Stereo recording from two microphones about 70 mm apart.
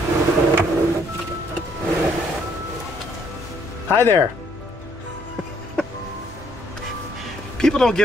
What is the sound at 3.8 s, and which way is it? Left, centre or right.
Speech, left.